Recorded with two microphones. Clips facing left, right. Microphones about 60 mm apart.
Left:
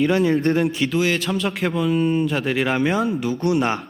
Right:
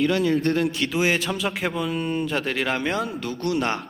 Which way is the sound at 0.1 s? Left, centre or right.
Left.